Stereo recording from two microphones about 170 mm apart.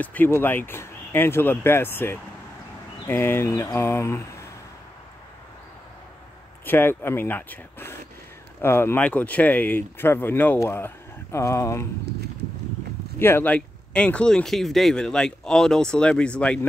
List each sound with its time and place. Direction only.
0.0 s speech: 10° left (ahead or behind)
6.6 s speech: 10° left (ahead or behind)
13.2 s speech: 15° left (ahead or behind)